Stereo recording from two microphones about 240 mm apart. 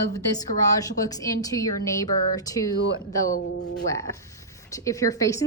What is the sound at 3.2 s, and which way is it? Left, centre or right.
Speech, left.